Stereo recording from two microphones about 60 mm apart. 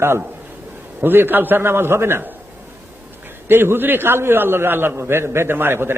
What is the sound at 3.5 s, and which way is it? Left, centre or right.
A man's voice, right.